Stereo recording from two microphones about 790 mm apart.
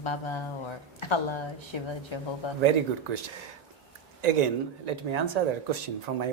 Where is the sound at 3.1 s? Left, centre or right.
Right.